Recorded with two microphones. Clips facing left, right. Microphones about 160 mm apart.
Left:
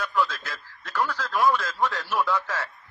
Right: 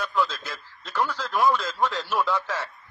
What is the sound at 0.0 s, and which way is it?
Radio, 20° right (ahead or behind).